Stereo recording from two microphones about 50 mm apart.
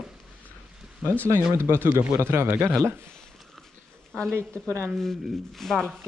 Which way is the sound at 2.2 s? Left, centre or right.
Right.